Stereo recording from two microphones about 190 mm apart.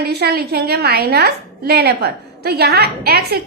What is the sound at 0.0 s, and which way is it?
A woman's voice, 60° right (ahead or behind).